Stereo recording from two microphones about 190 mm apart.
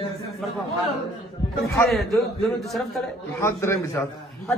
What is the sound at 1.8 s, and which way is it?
A man's voice, centre (ahead or behind).